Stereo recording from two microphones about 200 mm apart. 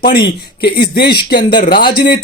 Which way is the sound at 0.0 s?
50° left (ahead or behind).